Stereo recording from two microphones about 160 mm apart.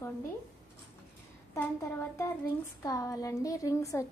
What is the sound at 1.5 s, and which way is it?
A woman's voice, 15° left (ahead or behind).